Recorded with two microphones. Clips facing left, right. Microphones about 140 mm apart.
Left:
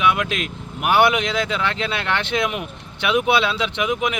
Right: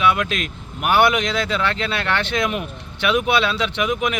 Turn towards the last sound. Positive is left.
turn(degrees=20)  # may be behind; listen again after turning